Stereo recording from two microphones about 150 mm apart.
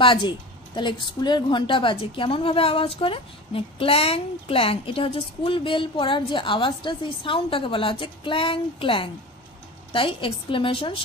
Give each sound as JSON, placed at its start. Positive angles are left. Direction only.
{"t": 0.0, "sound": "a woman's voice", "side_deg": 35}